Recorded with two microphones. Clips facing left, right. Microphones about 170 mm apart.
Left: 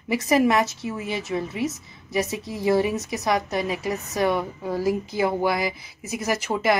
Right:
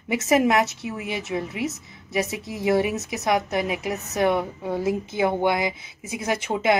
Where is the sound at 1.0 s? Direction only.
70° right (ahead or behind).